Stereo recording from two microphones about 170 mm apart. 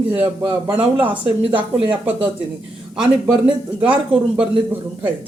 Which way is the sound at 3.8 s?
10° right (ahead or behind).